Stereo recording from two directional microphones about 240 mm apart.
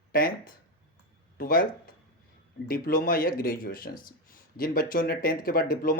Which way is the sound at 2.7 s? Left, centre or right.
Left.